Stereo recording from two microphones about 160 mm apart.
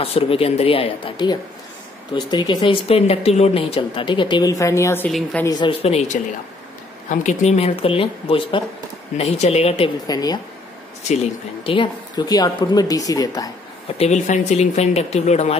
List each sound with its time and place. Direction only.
0.0 s speech: 35° left (ahead or behind); by 5.1 s 15° left (ahead or behind)
5.4 s speech: 25° left (ahead or behind)
7.1 s speech: 45° left (ahead or behind)
10.0 s speech: 25° left (ahead or behind)
11.6 s speech: 30° left (ahead or behind)
13.9 s speech: 45° left (ahead or behind)